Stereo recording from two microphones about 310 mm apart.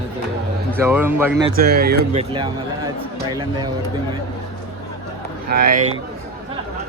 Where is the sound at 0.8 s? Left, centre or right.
Centre.